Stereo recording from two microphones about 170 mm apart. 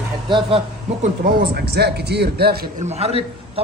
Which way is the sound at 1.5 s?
70° right (ahead or behind).